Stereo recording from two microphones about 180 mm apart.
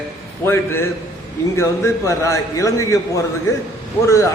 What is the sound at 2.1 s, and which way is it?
A man's voice, 15° left (ahead or behind).